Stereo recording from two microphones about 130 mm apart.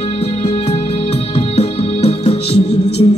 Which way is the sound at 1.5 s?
50° left (ahead or behind).